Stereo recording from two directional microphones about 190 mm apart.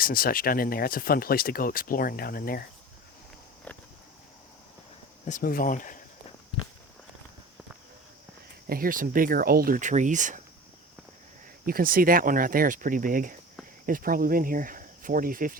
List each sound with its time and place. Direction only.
0.0 s speech: 50° left (ahead or behind)
5.2 s speech: 45° left (ahead or behind)
8.7 s speech: 50° right (ahead or behind)
11.6 s speech: 50° right (ahead or behind)